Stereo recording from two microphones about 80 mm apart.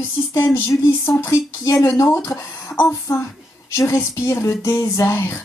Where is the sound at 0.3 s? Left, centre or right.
Left.